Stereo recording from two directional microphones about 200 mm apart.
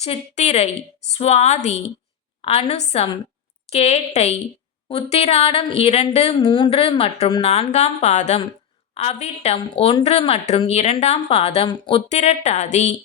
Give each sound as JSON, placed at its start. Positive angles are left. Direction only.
{"t": 0.0, "sound": "a woman's voice", "side_deg": 35}